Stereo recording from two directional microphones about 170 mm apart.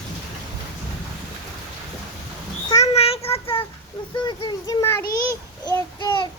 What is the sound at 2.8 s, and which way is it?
Child singing, 35° left (ahead or behind).